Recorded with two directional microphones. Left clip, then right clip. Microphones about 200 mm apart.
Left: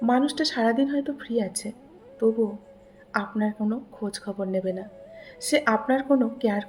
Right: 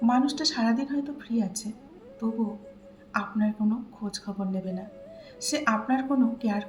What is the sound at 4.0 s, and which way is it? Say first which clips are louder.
A woman's voice: left 4 dB; 35° left (ahead or behind).